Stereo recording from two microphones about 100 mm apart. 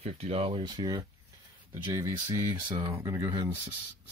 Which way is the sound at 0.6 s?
40° right (ahead or behind).